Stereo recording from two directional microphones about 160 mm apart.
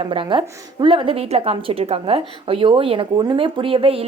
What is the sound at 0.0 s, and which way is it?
A woman's voice, 35° right (ahead or behind).